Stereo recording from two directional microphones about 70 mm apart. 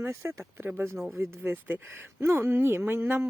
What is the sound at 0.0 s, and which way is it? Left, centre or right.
Speech, right.